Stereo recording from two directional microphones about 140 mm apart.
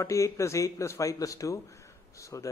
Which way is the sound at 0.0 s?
20° left (ahead or behind).